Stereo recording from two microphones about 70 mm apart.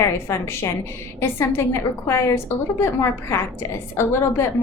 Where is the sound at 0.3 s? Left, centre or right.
Left.